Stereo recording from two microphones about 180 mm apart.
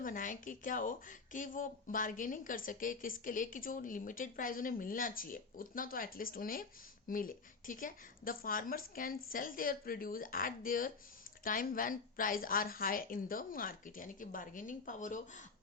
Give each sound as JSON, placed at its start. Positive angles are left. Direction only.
{"t": 0.0, "sound": "speech", "side_deg": 50}